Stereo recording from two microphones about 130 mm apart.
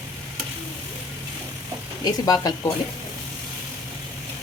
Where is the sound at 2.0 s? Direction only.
30° left (ahead or behind).